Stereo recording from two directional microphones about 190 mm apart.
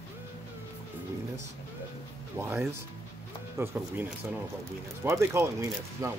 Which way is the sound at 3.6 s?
10° right (ahead or behind).